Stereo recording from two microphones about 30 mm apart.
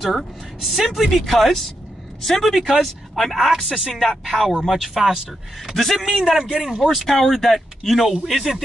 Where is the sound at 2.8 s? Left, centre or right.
Centre.